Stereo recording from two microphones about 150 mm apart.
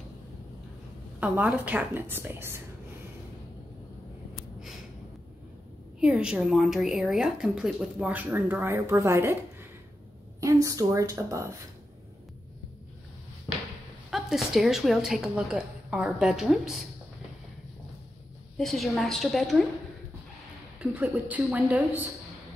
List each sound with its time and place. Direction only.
1.2 s speech: 10° right (ahead or behind)
5.9 s speech: 5° right (ahead or behind); by 11.4 s 20° right (ahead or behind)
14.1 s a woman's voice: centre (ahead or behind)
18.6 s a woman's voice: centre (ahead or behind)
20.8 s speech: 10° right (ahead or behind)